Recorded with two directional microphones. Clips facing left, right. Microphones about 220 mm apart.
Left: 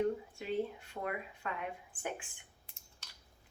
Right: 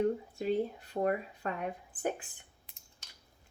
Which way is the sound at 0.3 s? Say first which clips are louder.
Right 5 dB; 40° right (ahead or behind).